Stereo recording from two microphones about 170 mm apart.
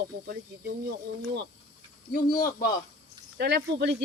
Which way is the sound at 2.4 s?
55° left (ahead or behind).